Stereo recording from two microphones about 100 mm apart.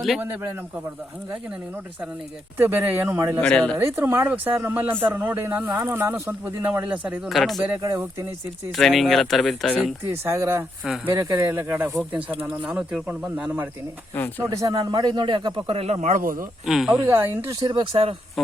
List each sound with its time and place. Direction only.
0.2 s speech: 20° right (ahead or behind)
2.6 s speech: 20° right (ahead or behind)
3.4 s speech: 10° left (ahead or behind)
3.8 s speech: 20° right (ahead or behind)
7.3 s speech: centre (ahead or behind)
8.7 s speech: centre (ahead or behind)
10.1 s speech: 25° right (ahead or behind)
14.5 s a man's voice: 40° right (ahead or behind); by 16.0 s 80° right
16.6 s speech: centre (ahead or behind)
17.1 s speech: 25° right (ahead or behind)
17.6 s speech: 55° right (ahead or behind)
18.4 s speech: centre (ahead or behind)